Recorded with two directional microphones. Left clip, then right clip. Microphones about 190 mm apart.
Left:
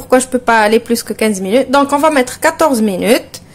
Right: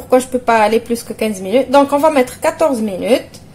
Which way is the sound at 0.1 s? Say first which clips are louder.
Left 2 dB; 25° left (ahead or behind).